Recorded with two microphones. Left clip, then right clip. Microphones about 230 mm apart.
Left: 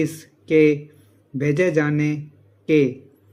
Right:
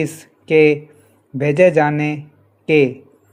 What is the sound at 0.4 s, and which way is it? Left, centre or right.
Speech, centre.